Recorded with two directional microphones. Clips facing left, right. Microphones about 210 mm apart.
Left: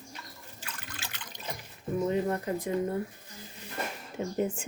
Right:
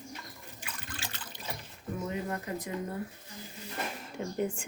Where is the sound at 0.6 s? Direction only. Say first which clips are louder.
Right 1 dB; 10° right (ahead or behind).